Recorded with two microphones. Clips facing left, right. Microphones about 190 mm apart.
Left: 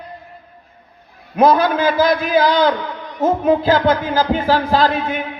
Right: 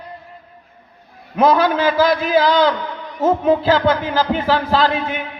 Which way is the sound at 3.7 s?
45° left (ahead or behind).